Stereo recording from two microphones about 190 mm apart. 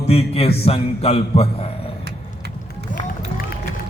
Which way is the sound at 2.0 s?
60° right (ahead or behind).